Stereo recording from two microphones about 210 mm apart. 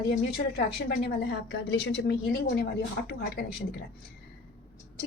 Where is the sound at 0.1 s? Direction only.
45° left (ahead or behind).